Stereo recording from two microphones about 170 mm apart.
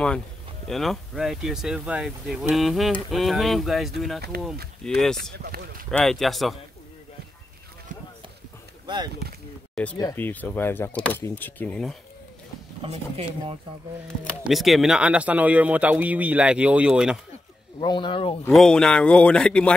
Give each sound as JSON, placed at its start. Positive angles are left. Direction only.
{"t": 0.7, "sound": "speech", "side_deg": 0}
{"t": 5.4, "sound": "speech", "side_deg": -60}
{"t": 5.9, "sound": "speech", "side_deg": 0}
{"t": 8.8, "sound": "speech", "side_deg": -25}
{"t": 9.8, "sound": "speech", "side_deg": 0}
{"t": 12.8, "sound": "speech", "side_deg": -35}
{"t": 14.2, "sound": "speech", "side_deg": 0}
{"t": 17.7, "sound": "speech", "side_deg": 25}
{"t": 18.5, "sound": "speech", "side_deg": 5}